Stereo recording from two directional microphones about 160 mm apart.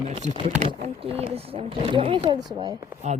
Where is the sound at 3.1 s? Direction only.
40° right (ahead or behind).